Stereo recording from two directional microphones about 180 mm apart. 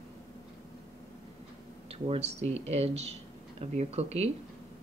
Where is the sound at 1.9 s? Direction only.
35° right (ahead or behind).